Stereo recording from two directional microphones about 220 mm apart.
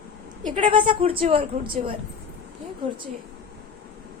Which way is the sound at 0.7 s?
20° right (ahead or behind).